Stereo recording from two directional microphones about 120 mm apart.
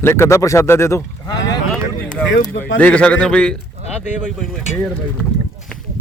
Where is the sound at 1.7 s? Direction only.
10° left (ahead or behind).